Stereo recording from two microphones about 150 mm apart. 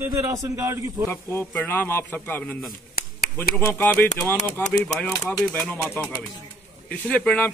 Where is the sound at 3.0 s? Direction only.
90° left.